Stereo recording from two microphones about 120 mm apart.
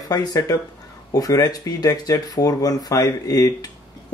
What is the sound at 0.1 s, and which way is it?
Speech, 30° left (ahead or behind).